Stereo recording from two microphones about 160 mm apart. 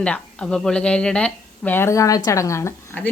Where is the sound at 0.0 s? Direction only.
5° left (ahead or behind).